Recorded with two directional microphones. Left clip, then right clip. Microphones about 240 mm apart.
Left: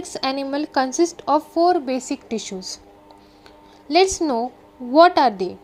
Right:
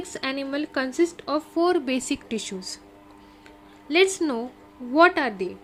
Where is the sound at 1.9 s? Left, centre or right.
Right.